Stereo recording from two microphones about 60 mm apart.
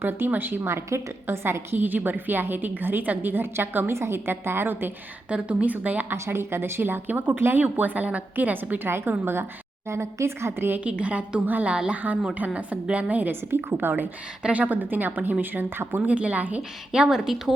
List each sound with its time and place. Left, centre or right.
0.0 s a woman's voice: right
0.9 s a woman's voice: right
5.3 s a woman's voice: right
6.1 s a woman's voice: right
8.9 s a woman's voice: right
9.9 s speech: right
10.8 s a woman's voice: right
13.5 s a woman's voice: right
14.4 s a woman's voice: right
16.0 s a woman's voice: right
16.9 s a woman's voice: centre